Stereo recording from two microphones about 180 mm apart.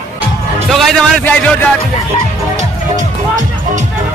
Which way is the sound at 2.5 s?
45° right (ahead or behind).